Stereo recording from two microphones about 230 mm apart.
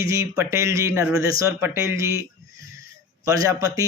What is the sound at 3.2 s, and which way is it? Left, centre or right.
Speech, centre.